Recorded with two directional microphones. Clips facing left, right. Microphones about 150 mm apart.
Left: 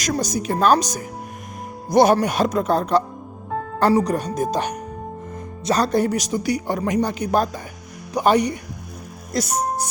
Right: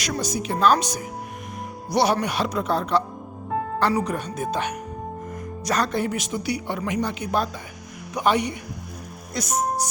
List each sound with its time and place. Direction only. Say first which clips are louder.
0.0 s speech: left 4 dB; 40° left (ahead or behind)